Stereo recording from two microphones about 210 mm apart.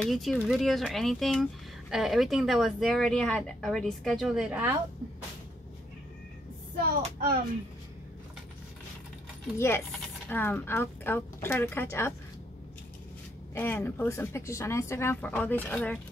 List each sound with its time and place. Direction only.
0.0 s speech: centre (ahead or behind)
7.0 s speech: 45° right (ahead or behind)
9.6 s speech: 10° left (ahead or behind)
13.6 s speech: 10° left (ahead or behind)